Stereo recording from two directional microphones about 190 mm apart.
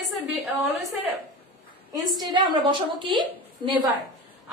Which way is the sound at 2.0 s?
20° right (ahead or behind).